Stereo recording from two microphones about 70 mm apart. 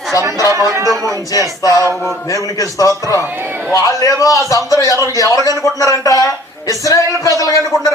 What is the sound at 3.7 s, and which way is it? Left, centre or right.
A man's voice, left.